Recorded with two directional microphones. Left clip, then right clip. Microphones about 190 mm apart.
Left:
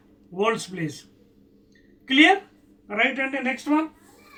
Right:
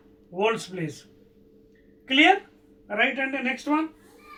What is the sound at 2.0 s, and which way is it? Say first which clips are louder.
Speech: left 2 dB; 10° right (ahead or behind).